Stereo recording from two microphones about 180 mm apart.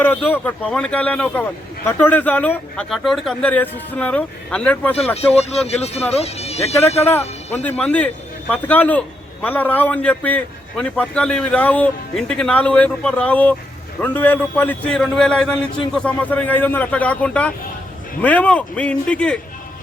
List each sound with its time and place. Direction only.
0.0 s speech: 10° left (ahead or behind)
5.1 s speech: 35° left (ahead or behind)
7.0 s speech: 10° left (ahead or behind)